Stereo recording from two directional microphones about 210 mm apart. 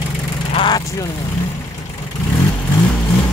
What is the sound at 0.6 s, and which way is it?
Speech, 20° left (ahead or behind).